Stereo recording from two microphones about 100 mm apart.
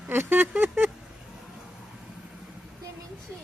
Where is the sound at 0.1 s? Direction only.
20° right (ahead or behind).